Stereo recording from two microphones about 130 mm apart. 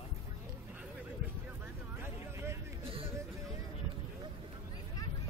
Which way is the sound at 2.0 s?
20° right (ahead or behind).